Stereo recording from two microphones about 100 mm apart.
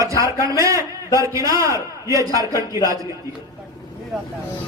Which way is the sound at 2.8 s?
35° right (ahead or behind).